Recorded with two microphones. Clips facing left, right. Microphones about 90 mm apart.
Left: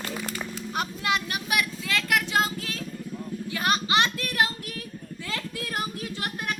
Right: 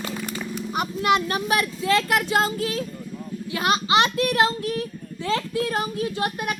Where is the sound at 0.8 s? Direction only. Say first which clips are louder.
Right 6 dB; 20° right (ahead or behind).